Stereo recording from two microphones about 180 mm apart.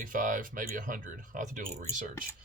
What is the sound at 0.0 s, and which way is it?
Speech, 50° right (ahead or behind).